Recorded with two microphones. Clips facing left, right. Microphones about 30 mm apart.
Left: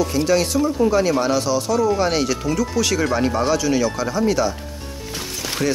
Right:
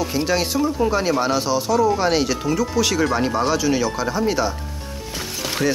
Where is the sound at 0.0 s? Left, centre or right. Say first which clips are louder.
Left 3 dB; centre.